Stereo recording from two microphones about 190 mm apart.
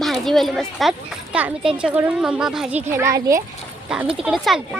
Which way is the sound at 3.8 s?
5° right (ahead or behind).